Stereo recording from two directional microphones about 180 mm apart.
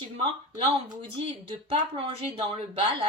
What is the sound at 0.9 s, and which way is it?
A woman's voice, 30° right (ahead or behind).